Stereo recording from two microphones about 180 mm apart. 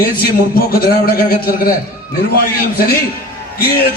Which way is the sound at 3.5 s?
60° left (ahead or behind).